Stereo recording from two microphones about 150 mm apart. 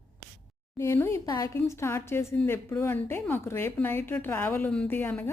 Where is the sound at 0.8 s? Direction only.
15° left (ahead or behind).